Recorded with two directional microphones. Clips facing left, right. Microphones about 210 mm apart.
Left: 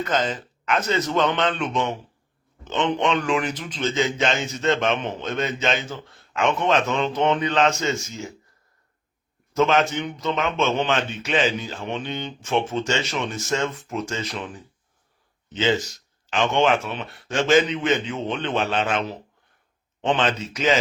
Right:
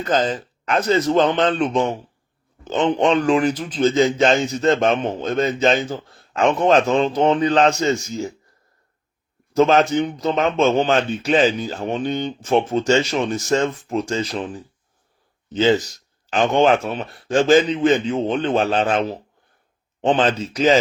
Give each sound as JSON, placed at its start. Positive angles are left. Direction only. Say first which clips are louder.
{"t": 0.0, "sound": "a man's voice", "louder": "right 4 dB", "side_deg": -35}
{"t": 9.5, "sound": "a man's voice", "louder": "right 5 dB", "side_deg": -35}